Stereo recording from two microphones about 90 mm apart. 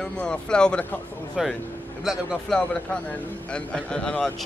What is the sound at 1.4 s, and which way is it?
A man's voice, 5° right (ahead or behind).